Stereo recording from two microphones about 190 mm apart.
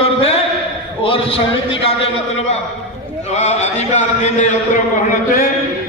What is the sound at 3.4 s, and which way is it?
A man's voice, 35° left (ahead or behind).